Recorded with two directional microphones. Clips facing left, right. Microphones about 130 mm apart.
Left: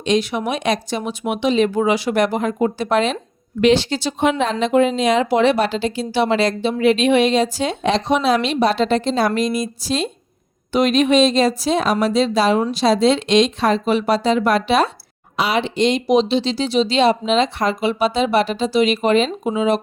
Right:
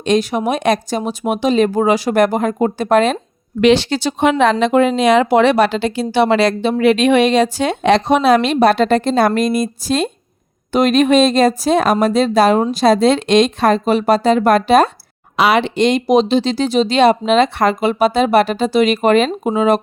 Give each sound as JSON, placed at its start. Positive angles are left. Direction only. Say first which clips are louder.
{"t": 0.0, "sound": "speech", "louder": "right 3 dB", "side_deg": -45}
{"t": 3.6, "sound": "speech", "louder": "right 3 dB", "side_deg": -75}
{"t": 15.4, "sound": "speech", "louder": "right 5 dB", "side_deg": -65}